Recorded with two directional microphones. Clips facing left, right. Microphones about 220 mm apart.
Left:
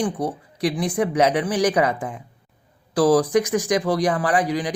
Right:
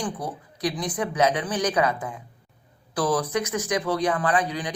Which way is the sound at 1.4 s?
30° left (ahead or behind).